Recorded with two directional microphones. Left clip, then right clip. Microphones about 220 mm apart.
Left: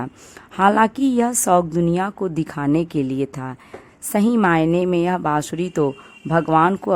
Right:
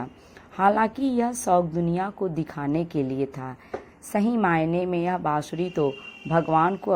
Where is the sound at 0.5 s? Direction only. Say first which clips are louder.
Left 5 dB; 30° left (ahead or behind).